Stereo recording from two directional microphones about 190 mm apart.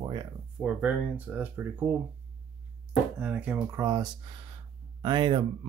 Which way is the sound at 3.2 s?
5° right (ahead or behind).